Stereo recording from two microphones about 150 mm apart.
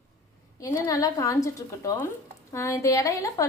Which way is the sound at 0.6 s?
20° left (ahead or behind).